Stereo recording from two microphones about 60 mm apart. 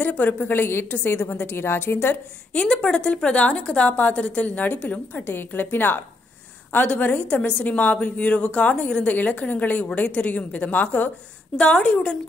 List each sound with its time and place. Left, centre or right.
0.0 s a woman's voice: left
2.5 s a woman's voice: centre